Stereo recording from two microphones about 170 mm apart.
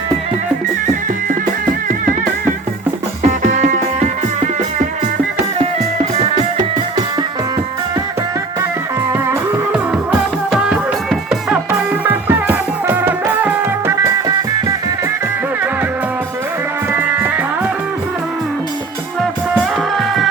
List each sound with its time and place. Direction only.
3.2 s music: 45° right (ahead or behind)
9.1 s music: 15° right (ahead or behind)
10.1 s music: 5° right (ahead or behind)
16.9 s music: 10° right (ahead or behind)
19.5 s music: centre (ahead or behind)